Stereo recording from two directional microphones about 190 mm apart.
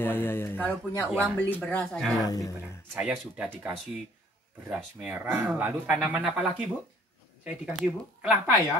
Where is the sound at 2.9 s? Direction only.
5° right (ahead or behind).